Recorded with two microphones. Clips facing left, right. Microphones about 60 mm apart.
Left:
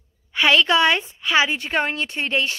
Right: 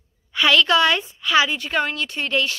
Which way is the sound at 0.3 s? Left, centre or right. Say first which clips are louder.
Even; left.